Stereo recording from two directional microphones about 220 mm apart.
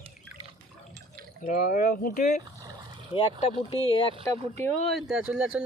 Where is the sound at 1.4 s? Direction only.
40° left (ahead or behind).